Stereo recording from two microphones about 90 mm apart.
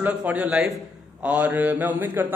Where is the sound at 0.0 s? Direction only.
15° right (ahead or behind).